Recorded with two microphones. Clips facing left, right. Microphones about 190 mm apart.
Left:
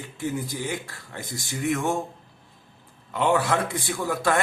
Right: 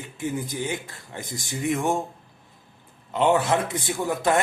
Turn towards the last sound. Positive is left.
turn(degrees=-20)  # may be behind; listen again after turning